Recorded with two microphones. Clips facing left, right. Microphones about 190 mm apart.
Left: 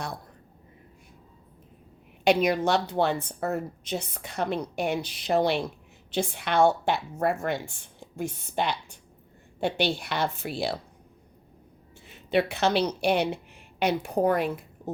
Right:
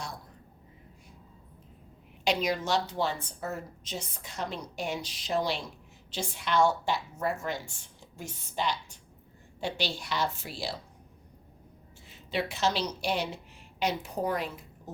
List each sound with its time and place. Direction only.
2.2 s a woman's voice: 60° left (ahead or behind)
12.0 s a woman's voice: 60° left (ahead or behind)